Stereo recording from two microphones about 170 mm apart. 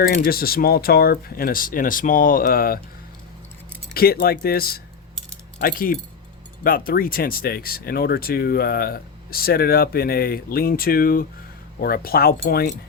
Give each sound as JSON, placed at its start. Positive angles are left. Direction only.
{"t": 0.1, "sound": "speech", "side_deg": 60}
{"t": 3.9, "sound": "speech", "side_deg": 65}